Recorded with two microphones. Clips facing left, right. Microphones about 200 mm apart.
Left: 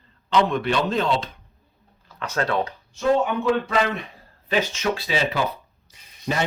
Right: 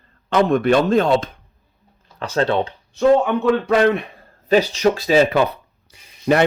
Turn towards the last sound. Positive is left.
turn(degrees=-55)  # may be behind; listen again after turning